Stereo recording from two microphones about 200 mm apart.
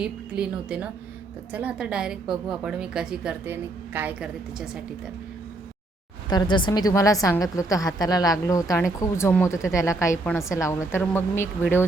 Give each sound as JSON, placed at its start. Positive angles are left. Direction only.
{"t": 0.0, "sound": "a woman's voice", "side_deg": -5}
{"t": 6.3, "sound": "a woman's voice", "side_deg": 20}